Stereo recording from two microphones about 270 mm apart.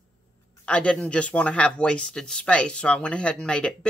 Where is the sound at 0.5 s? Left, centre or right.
Centre.